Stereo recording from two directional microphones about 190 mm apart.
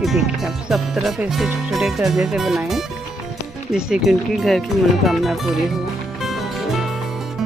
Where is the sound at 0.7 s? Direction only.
Centre (ahead or behind).